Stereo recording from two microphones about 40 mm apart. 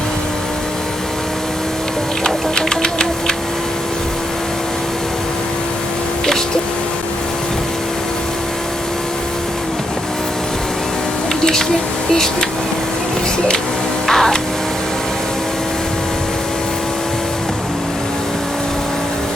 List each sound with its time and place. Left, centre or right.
2.2 s music: centre
12.1 s speech: centre
14.1 s speech: centre